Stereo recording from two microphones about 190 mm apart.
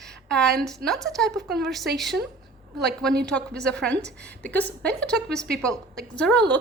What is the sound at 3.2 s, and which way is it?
A woman's voice, 5° left (ahead or behind).